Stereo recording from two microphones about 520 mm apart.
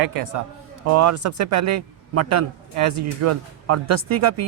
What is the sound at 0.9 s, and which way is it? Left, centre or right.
Speech, right.